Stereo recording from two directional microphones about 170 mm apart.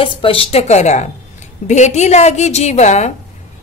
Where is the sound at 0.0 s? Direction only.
30° left (ahead or behind).